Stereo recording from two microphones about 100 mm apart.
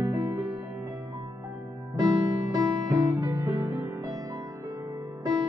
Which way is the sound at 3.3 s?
30° right (ahead or behind).